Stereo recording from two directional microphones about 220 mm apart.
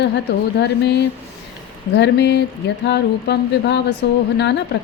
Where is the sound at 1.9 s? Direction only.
50° left (ahead or behind).